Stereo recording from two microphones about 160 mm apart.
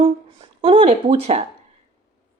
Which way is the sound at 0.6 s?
35° right (ahead or behind).